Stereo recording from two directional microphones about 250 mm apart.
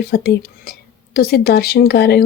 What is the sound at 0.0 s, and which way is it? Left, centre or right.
Speech, left.